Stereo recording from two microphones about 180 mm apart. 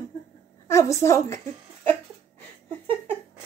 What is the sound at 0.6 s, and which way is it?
Speech, 15° left (ahead or behind).